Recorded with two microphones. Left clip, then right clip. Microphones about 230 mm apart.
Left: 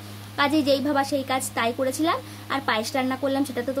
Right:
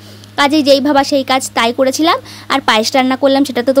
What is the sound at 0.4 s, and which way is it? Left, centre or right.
Speech, right.